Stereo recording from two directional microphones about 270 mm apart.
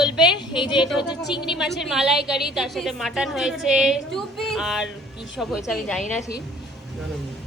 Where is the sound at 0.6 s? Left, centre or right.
Centre.